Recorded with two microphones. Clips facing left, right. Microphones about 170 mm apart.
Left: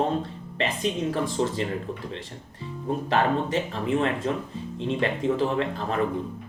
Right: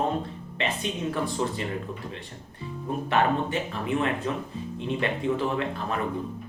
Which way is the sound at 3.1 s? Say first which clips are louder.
Left 1 dB; 30° left (ahead or behind).